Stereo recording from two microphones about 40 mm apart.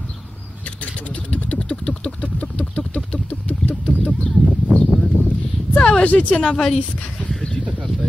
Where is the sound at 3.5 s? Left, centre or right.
Left.